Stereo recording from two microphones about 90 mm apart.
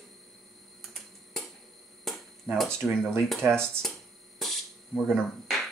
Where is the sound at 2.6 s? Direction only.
5° left (ahead or behind).